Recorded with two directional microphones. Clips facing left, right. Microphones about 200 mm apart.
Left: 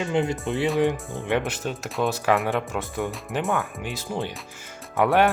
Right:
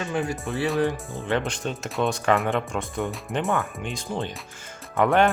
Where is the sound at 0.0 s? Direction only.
20° left (ahead or behind).